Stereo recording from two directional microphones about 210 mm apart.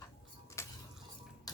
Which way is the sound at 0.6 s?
15° left (ahead or behind).